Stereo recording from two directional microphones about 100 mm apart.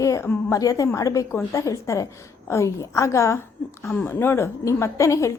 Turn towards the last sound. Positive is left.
turn(degrees=30)  # may be behind; listen again after turning